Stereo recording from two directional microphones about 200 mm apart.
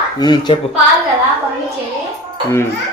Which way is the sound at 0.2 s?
20° left (ahead or behind).